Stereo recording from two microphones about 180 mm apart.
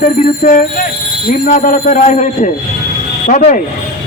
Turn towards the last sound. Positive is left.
turn(degrees=45)  # may be behind; listen again after turning